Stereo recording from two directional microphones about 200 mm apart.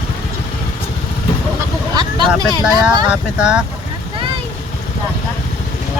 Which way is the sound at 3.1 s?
5° right (ahead or behind).